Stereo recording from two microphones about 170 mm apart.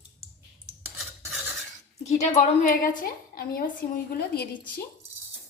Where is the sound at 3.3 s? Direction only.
60° left (ahead or behind).